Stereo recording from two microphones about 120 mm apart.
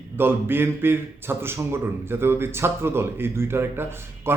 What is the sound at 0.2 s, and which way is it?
A man's voice, 20° right (ahead or behind).